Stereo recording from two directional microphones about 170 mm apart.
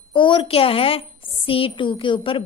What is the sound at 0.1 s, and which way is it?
A woman's voice, 30° left (ahead or behind).